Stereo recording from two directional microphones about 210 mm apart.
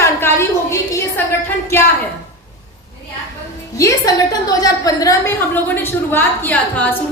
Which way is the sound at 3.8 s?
15° left (ahead or behind).